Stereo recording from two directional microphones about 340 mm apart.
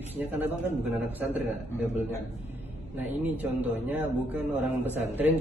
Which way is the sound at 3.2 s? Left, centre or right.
Centre.